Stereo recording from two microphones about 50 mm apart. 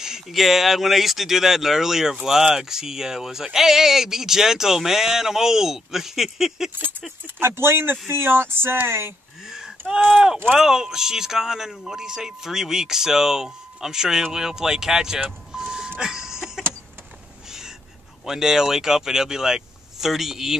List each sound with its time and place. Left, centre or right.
0.0 s speech: centre
7.3 s speech: right
9.5 s speech: centre
15.2 s vehicle: centre
16.0 s a sound: centre
18.2 s speech: centre